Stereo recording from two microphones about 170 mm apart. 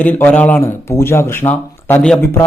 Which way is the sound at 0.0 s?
10° left (ahead or behind).